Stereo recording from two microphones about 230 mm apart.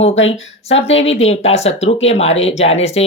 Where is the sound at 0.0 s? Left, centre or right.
Left.